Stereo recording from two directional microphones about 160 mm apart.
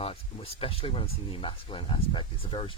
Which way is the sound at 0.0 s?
35° left (ahead or behind).